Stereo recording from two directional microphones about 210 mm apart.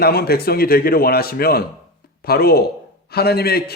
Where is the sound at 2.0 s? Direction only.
45° left (ahead or behind).